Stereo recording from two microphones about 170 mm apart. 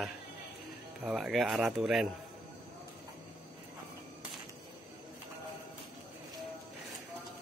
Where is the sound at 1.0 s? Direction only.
5° right (ahead or behind).